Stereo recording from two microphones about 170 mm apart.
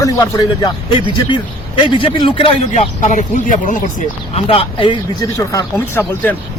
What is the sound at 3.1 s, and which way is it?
Speech, 50° left (ahead or behind).